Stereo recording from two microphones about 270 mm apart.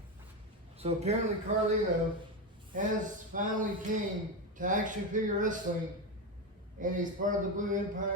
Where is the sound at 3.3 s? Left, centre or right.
Right.